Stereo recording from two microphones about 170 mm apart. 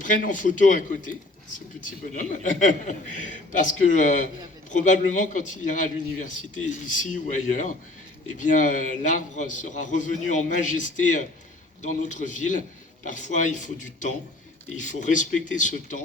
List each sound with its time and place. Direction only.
0.0 s a man's voice: 50° left (ahead or behind)